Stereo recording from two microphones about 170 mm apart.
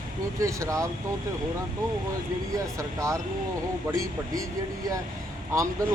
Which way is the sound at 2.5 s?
20° right (ahead or behind).